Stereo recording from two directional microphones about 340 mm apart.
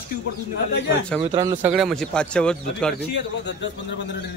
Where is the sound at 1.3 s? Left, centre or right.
Centre.